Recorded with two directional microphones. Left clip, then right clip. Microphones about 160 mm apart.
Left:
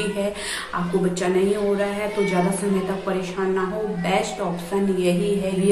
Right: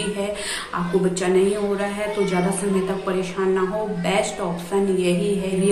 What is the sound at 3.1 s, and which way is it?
A woman's voice, 10° right (ahead or behind).